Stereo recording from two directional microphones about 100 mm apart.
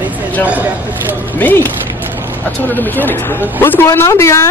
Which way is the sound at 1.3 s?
20° left (ahead or behind).